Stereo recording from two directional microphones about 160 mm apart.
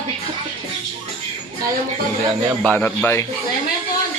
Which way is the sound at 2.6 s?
10° left (ahead or behind).